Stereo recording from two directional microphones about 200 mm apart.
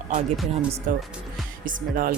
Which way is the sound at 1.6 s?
45° right (ahead or behind).